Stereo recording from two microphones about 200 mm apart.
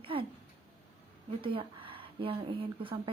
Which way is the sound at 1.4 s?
25° right (ahead or behind).